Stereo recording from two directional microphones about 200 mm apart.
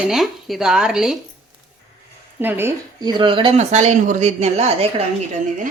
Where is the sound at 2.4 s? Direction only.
10° right (ahead or behind); by 5.0 s 30° right (ahead or behind).